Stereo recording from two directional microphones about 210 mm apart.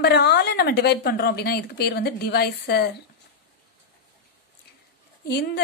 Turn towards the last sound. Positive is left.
turn(degrees=50)  # may be behind; listen again after turning